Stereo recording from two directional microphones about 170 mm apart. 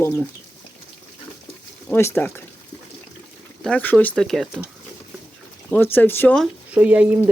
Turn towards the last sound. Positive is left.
turn(degrees=-10)  # may be behind; listen again after turning